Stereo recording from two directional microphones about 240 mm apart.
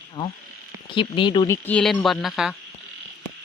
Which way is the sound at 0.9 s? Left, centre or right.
Left.